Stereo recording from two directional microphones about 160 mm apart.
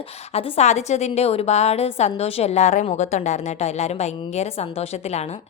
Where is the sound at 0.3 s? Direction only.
40° left (ahead or behind).